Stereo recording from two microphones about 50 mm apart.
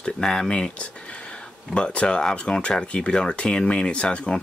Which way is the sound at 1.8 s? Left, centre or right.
Centre.